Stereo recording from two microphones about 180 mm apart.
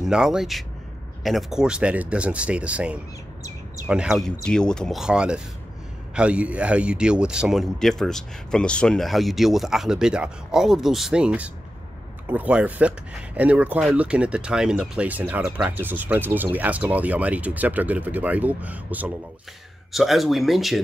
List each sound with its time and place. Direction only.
0.0 s a man's voice: 5° right (ahead or behind)